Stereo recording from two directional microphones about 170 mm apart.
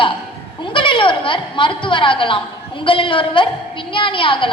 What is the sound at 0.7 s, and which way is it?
A woman's voice, 30° left (ahead or behind).